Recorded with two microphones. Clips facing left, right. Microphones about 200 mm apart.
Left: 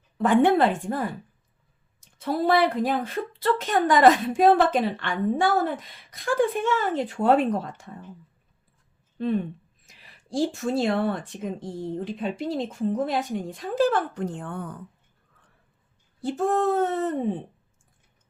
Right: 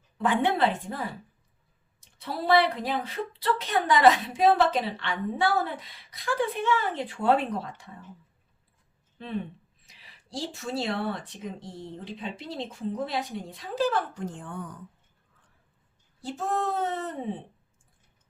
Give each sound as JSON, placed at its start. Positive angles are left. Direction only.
{"t": 0.2, "sound": "speech", "side_deg": 45}
{"t": 9.8, "sound": "speech", "side_deg": 50}
{"t": 16.2, "sound": "speech", "side_deg": 50}